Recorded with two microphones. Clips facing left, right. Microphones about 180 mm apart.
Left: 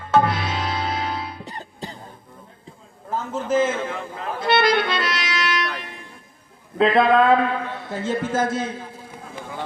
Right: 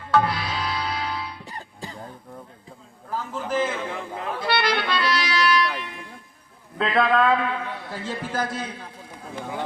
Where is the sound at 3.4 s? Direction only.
20° left (ahead or behind).